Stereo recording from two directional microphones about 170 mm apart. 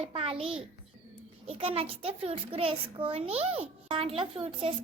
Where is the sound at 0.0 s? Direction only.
35° right (ahead or behind).